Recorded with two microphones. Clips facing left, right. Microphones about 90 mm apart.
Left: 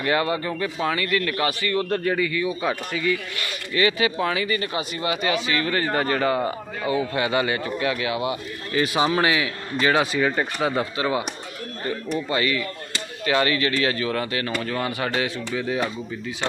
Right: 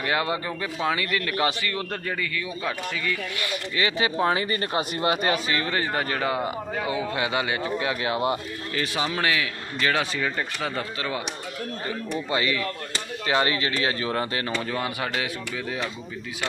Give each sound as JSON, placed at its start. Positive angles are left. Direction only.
{"t": 0.0, "sound": "speech", "side_deg": -10}
{"t": 2.1, "sound": "speech", "side_deg": 20}
{"t": 3.3, "sound": "speech", "side_deg": -15}
{"t": 3.9, "sound": "speech", "side_deg": -30}
{"t": 5.5, "sound": "speech", "side_deg": -20}
{"t": 7.9, "sound": "speech", "side_deg": -35}
{"t": 8.7, "sound": "speech", "side_deg": 15}
{"t": 12.3, "sound": "speech", "side_deg": -20}
{"t": 14.6, "sound": "speech", "side_deg": -10}